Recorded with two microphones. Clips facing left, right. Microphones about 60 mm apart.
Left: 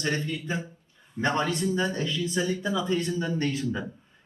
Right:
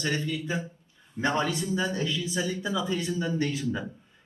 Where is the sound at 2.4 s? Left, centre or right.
Left.